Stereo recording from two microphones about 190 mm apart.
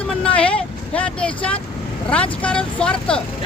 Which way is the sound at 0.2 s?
5° left (ahead or behind).